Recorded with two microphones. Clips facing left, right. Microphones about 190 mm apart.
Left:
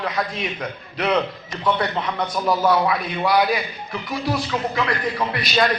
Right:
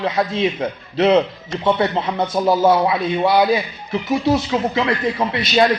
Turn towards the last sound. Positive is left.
turn(degrees=-25)  # may be behind; listen again after turning